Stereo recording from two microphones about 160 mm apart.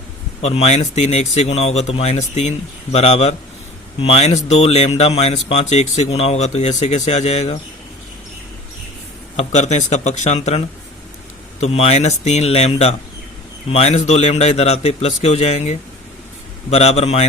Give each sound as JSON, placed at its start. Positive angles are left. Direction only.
{"t": 0.4, "sound": "speech", "side_deg": 40}
{"t": 9.3, "sound": "a man's voice", "side_deg": 45}
{"t": 11.6, "sound": "a man's voice", "side_deg": 40}